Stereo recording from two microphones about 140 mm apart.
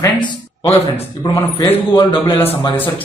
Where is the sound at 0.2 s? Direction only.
35° left (ahead or behind).